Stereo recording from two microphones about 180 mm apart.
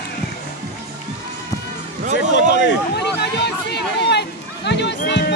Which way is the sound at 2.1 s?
75° left (ahead or behind).